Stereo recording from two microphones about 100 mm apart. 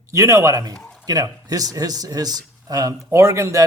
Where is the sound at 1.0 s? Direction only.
40° right (ahead or behind).